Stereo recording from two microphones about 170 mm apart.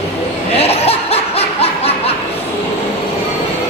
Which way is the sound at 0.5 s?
35° left (ahead or behind).